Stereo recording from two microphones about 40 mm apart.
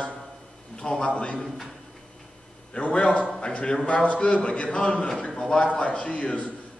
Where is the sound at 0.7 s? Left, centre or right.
Left.